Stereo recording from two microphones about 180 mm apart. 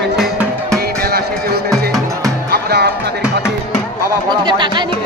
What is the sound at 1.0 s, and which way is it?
Music, 60° right (ahead or behind).